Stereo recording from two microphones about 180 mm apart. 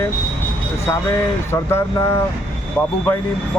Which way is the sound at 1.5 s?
15° left (ahead or behind).